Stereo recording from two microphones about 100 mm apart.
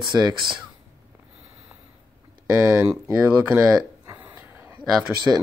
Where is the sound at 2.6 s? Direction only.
10° right (ahead or behind).